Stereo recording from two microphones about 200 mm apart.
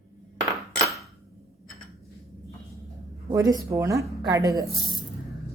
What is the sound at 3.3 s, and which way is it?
A woman's voice, 20° right (ahead or behind).